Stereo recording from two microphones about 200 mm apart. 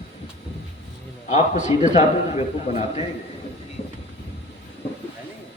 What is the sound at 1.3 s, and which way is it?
A man's voice, 35° left (ahead or behind).